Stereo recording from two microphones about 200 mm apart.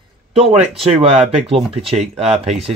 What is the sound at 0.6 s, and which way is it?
Speech, 35° right (ahead or behind).